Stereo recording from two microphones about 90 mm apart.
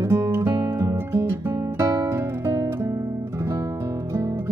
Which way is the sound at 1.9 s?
45° right (ahead or behind).